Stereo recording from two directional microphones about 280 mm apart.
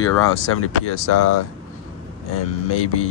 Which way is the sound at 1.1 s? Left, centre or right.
Left.